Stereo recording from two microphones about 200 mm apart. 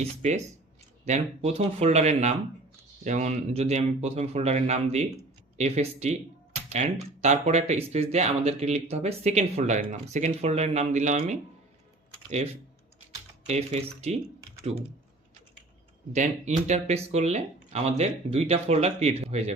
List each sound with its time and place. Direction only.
0.2 s speech: 35° right (ahead or behind)
12.1 s typing: 30° right (ahead or behind)
13.5 s speech: 35° right (ahead or behind)
16.1 s speech: 35° right (ahead or behind)